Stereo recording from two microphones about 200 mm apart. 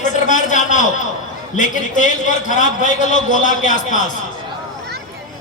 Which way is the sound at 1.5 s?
40° left (ahead or behind).